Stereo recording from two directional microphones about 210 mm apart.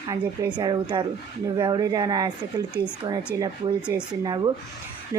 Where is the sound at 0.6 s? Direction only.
20° right (ahead or behind).